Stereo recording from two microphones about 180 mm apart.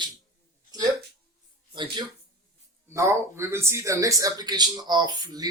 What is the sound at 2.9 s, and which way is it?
Speech, 15° right (ahead or behind).